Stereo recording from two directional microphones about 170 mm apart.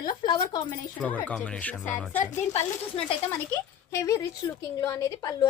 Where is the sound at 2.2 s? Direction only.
45° left (ahead or behind).